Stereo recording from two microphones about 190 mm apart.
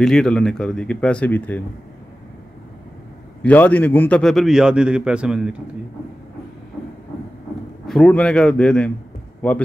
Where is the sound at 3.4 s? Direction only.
10° left (ahead or behind).